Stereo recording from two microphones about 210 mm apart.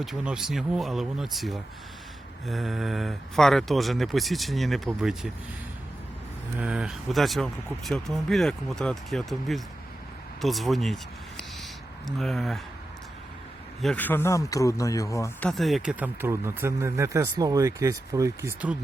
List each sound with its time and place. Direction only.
0.0 s speech: centre (ahead or behind)
6.6 s speech: 5° right (ahead or behind)
13.8 s speech: 10° left (ahead or behind)
15.4 s speech: centre (ahead or behind)